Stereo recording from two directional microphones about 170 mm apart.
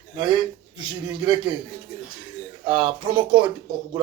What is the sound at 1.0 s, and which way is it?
Speech, 25° right (ahead or behind).